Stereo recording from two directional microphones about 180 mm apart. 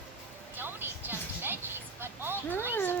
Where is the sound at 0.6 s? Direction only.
10° right (ahead or behind).